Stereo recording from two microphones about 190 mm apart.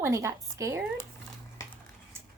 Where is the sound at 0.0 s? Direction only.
15° right (ahead or behind).